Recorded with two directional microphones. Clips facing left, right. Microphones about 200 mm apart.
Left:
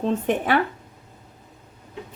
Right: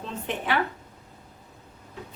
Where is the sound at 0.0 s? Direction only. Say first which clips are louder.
Left 10 dB; 50° left (ahead or behind).